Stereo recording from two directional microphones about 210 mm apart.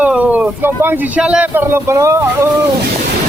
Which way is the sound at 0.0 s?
5° right (ahead or behind).